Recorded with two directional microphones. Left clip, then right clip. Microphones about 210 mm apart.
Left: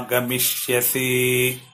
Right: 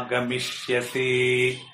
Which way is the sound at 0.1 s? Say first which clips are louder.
Left 5 dB; 45° left (ahead or behind).